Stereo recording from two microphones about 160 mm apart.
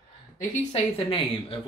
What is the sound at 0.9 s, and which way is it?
Speech, 35° left (ahead or behind).